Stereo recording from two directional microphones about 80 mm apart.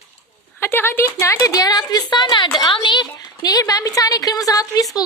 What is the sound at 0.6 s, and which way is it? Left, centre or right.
Speech, left.